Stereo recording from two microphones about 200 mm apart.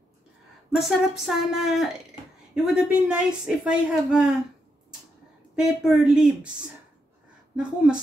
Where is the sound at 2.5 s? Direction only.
5° right (ahead or behind).